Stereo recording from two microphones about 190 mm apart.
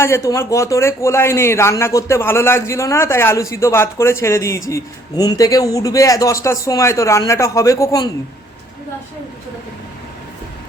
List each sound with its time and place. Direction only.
0.0 s speech: 15° left (ahead or behind)